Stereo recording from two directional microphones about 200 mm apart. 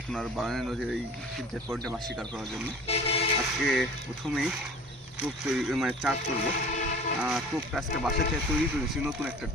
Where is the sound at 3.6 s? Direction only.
Centre (ahead or behind).